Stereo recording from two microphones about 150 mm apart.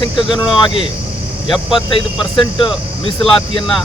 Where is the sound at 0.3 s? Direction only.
35° left (ahead or behind).